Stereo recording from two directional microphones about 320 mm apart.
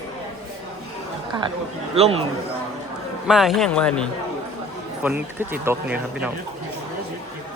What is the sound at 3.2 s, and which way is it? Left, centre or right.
Speech, centre.